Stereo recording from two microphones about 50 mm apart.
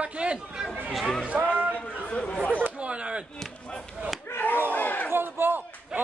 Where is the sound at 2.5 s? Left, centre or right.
Right.